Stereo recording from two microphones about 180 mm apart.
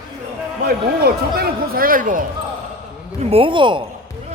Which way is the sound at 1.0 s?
60° right (ahead or behind).